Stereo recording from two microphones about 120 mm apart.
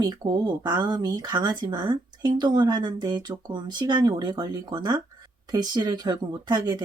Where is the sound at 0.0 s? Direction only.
35° right (ahead or behind).